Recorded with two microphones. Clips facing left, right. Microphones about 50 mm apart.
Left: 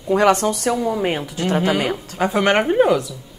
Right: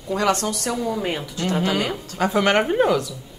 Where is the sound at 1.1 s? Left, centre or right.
Left.